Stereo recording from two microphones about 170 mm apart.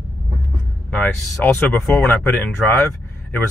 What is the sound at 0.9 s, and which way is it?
Speech, 10° left (ahead or behind).